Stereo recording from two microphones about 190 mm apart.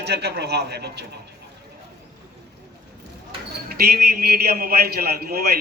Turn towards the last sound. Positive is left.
turn(degrees=-55)  # may be behind; listen again after turning